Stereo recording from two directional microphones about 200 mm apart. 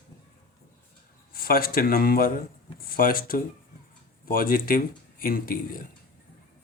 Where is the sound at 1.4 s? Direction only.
45° left (ahead or behind).